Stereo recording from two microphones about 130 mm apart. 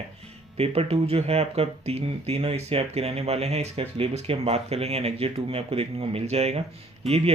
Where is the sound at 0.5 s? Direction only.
50° right (ahead or behind).